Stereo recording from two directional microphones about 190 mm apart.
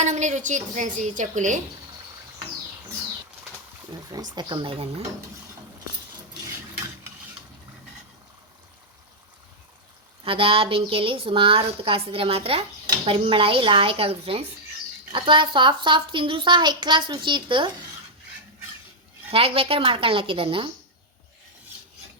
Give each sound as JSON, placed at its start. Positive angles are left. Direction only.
{"t": 0.0, "sound": "speech", "side_deg": -40}
{"t": 4.1, "sound": "a child's voice", "side_deg": -20}
{"t": 10.2, "sound": "a child's voice", "side_deg": -30}
{"t": 19.3, "sound": "a child's voice", "side_deg": -30}